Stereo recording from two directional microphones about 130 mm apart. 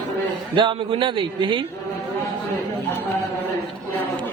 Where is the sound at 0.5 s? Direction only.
40° right (ahead or behind).